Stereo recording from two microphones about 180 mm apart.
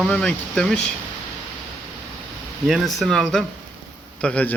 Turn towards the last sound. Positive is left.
turn(degrees=5)  # may be behind; listen again after turning